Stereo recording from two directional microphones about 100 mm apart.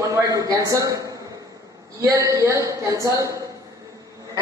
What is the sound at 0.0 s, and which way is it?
A woman's voice, 35° right (ahead or behind).